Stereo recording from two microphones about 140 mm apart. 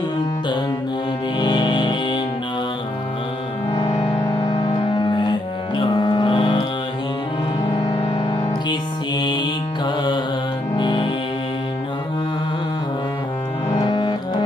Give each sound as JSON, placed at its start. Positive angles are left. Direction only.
{"t": 1.4, "sound": "music", "side_deg": 35}
{"t": 4.5, "sound": "music", "side_deg": 30}
{"t": 7.9, "sound": "music", "side_deg": 35}
{"t": 13.7, "sound": "music", "side_deg": 25}